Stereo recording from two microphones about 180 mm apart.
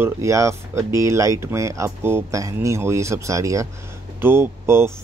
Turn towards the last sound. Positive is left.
turn(degrees=-15)  # may be behind; listen again after turning